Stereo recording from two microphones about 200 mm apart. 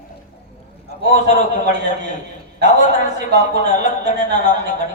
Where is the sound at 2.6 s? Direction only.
40° left (ahead or behind).